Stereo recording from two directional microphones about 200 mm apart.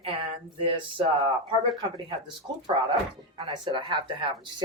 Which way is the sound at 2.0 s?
20° right (ahead or behind).